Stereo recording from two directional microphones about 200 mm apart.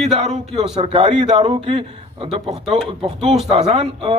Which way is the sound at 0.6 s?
30° right (ahead or behind).